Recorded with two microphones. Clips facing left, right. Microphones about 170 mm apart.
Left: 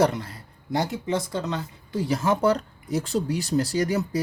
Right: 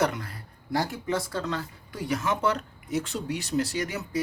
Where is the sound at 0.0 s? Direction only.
30° left (ahead or behind).